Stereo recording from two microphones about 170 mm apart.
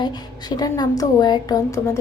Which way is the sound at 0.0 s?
25° left (ahead or behind).